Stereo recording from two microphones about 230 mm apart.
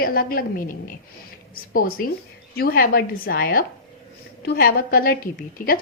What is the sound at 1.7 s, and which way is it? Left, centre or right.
A woman's voice, left.